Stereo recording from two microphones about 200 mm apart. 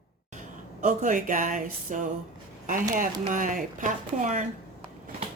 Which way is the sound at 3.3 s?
40° right (ahead or behind).